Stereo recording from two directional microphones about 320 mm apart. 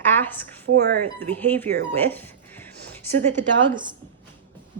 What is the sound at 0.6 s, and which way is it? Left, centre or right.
Speech, right.